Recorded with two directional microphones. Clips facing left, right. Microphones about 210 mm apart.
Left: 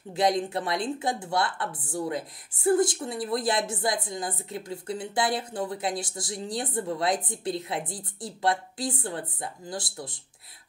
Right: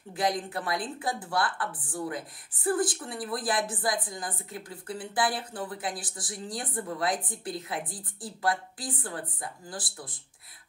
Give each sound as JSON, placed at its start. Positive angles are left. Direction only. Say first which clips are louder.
{"t": 0.1, "sound": "a woman's voice", "louder": "left 5 dB", "side_deg": 25}